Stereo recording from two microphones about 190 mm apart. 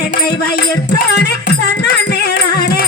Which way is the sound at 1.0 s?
65° left (ahead or behind).